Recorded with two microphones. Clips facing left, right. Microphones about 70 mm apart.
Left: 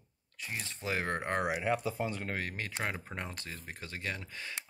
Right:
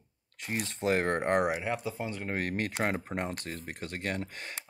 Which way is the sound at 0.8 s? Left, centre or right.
Right.